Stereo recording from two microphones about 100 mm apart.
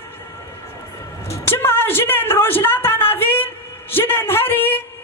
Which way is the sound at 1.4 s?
20° left (ahead or behind).